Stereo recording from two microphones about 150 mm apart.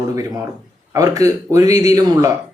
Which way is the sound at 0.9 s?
25° right (ahead or behind).